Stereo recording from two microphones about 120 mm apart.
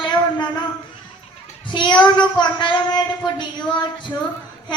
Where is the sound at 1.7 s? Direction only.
40° left (ahead or behind).